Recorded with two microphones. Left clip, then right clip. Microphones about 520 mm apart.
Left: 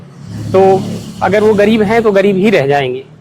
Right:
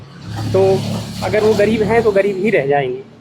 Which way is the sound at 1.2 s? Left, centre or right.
Left.